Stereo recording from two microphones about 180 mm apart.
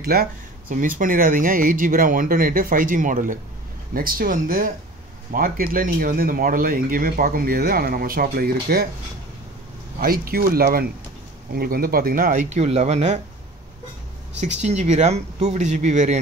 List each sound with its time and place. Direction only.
0.0 s speech: 55° right (ahead or behind)
9.9 s speech: 55° right (ahead or behind); by 13.2 s 40° right (ahead or behind)
14.4 s speech: 40° right (ahead or behind)